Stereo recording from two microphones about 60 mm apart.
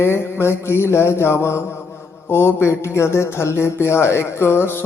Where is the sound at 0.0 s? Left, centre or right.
Left.